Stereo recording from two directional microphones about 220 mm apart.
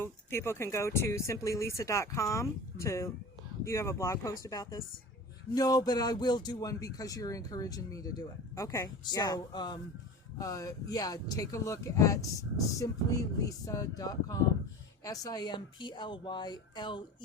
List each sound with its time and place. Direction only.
0.0 s speech: 10° left (ahead or behind)